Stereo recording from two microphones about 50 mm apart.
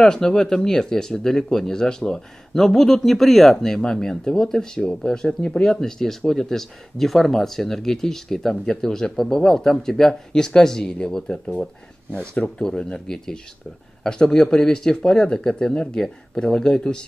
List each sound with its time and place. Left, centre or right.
0.0 s speech: centre